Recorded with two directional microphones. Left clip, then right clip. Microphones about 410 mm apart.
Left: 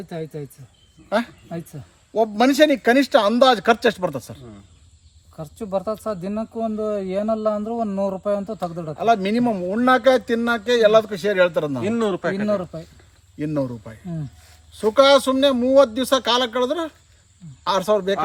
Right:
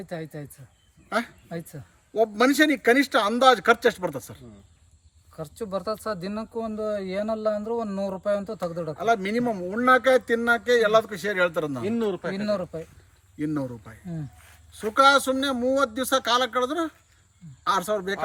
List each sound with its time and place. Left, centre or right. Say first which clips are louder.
2.1 s a man's voice: left 4 dB; centre
5.4 s speech: left 5 dB; centre
9.0 s a man's voice: left 6 dB; centre
11.8 s a man's voice: left 5 dB; left
12.5 s speech: left 4 dB; centre
13.4 s a man's voice: left 5 dB; centre